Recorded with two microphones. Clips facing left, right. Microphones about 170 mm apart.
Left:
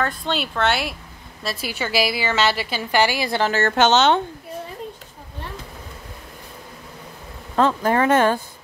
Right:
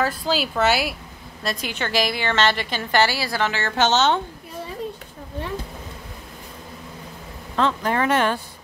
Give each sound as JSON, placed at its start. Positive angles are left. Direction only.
{"t": 0.0, "sound": "a woman's voice", "side_deg": 0}
{"t": 3.5, "sound": "a woman's voice", "side_deg": 55}
{"t": 7.5, "sound": "speech", "side_deg": 45}